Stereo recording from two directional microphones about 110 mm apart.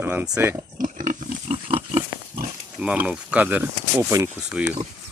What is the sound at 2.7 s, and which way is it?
Speech, 10° right (ahead or behind).